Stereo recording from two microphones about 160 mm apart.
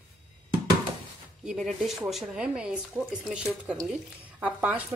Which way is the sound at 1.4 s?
Centre (ahead or behind).